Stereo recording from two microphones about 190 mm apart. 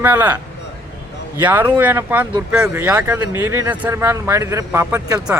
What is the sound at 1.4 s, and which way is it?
Speech, 10° right (ahead or behind).